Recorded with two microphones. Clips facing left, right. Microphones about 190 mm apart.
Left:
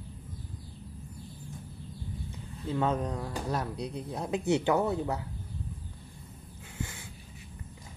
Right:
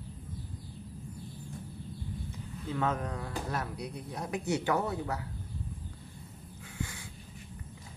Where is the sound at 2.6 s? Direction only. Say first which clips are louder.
Left 3 dB; 30° left (ahead or behind).